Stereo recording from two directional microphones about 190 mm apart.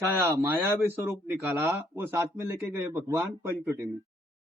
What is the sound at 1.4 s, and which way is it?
A man's voice, 15° right (ahead or behind).